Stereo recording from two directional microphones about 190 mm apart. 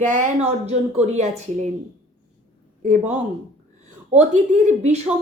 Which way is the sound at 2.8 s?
40° right (ahead or behind).